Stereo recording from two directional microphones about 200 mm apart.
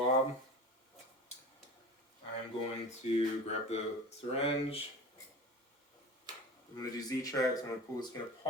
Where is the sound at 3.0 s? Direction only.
35° left (ahead or behind).